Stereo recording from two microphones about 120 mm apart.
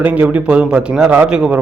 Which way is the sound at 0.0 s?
10° right (ahead or behind).